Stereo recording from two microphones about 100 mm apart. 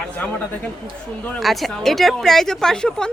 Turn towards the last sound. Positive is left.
turn(degrees=5)  # may be behind; listen again after turning